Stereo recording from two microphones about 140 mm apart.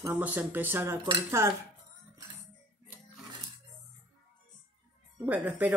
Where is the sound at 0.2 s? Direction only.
10° right (ahead or behind).